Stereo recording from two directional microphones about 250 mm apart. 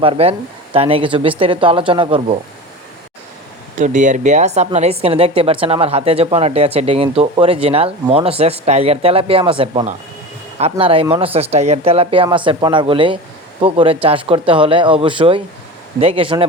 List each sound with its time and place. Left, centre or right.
0.0 s speech: right
3.8 s speech: right